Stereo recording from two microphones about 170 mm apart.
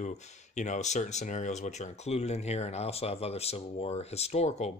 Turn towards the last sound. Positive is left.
turn(degrees=40)  # may be behind; listen again after turning